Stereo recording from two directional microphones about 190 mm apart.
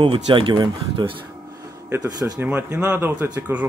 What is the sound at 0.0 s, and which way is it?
Speech, 25° right (ahead or behind).